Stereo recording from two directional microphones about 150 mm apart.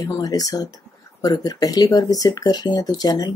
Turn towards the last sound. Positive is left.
turn(degrees=25)  # may be behind; listen again after turning